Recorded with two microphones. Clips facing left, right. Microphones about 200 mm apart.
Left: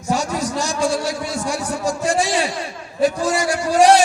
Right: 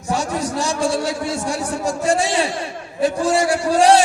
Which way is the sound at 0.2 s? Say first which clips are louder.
Even; 30° right (ahead or behind).